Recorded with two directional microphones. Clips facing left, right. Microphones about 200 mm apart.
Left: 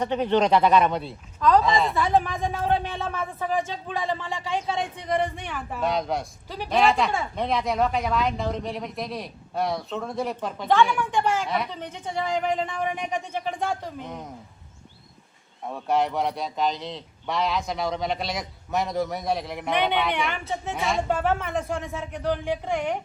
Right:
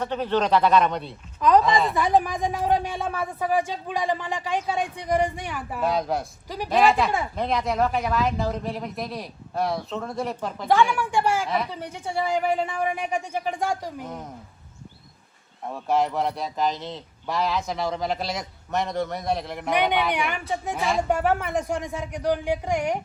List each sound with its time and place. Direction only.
0.0 s speech: 15° left (ahead or behind)
1.4 s speech: 20° right (ahead or behind)
1.6 s speech: centre (ahead or behind)
2.0 s speech: 15° right (ahead or behind)
15.6 s speech: centre (ahead or behind)
19.7 s speech: 10° right (ahead or behind)
21.1 s speech: 15° right (ahead or behind)